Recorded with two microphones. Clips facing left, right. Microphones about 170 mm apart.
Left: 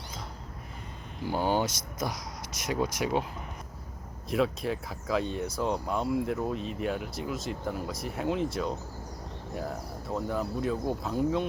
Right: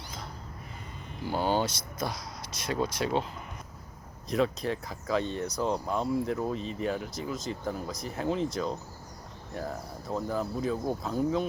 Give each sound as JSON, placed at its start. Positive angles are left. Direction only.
{"t": 1.2, "sound": "speech", "side_deg": 15}
{"t": 4.3, "sound": "speech", "side_deg": 0}